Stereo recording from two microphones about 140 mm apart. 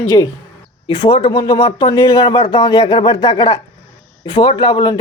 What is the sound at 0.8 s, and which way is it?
A man's voice, 35° left (ahead or behind).